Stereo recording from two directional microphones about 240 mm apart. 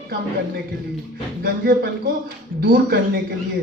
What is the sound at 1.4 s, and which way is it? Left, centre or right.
Speech, right.